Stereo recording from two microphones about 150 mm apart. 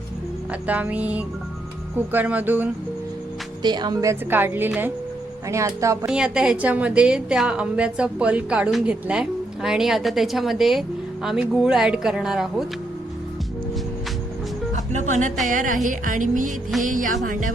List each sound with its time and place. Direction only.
0.7 s a woman's voice: 10° right (ahead or behind)
3.6 s a woman's voice: 30° right (ahead or behind)
6.1 s a woman's voice: 5° right (ahead or behind)
14.9 s speech: 55° right (ahead or behind)